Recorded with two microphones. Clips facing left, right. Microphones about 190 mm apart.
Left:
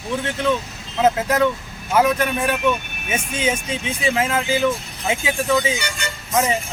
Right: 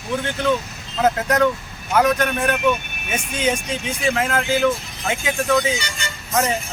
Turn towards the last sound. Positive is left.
turn(degrees=5)  # may be behind; listen again after turning